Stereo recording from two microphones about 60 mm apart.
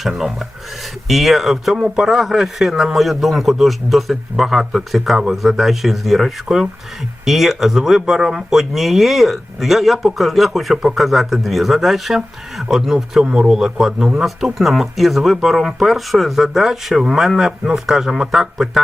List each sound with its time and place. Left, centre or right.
0.1 s speech: centre